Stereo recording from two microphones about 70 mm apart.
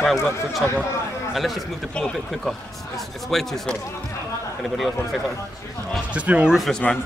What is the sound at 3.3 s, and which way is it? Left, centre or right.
Speech, centre.